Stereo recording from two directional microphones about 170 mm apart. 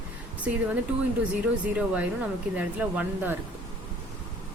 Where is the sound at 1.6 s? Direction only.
10° right (ahead or behind).